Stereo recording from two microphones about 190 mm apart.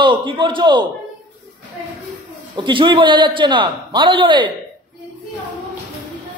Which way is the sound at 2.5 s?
25° right (ahead or behind).